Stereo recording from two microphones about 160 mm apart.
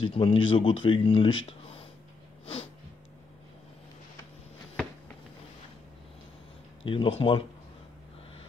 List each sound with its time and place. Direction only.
0.0 s speech: 35° left (ahead or behind)
6.8 s speech: 35° left (ahead or behind)